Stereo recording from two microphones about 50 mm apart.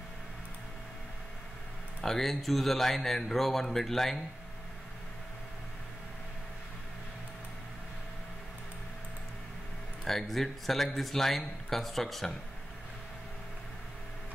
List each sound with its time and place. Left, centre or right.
2.0 s speech: centre
10.0 s speech: centre